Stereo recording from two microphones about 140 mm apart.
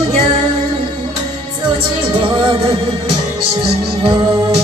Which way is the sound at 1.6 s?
35° right (ahead or behind).